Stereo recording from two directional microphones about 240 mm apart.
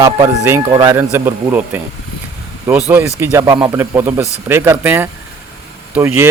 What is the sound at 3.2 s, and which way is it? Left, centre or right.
Speech, centre.